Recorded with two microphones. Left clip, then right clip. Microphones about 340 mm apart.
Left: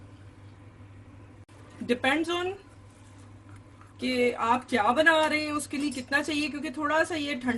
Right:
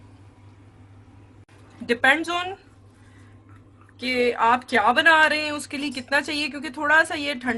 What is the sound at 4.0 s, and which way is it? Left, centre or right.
Speech, right.